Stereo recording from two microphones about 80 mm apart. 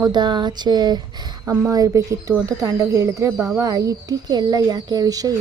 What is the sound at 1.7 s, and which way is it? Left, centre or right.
Speech, right.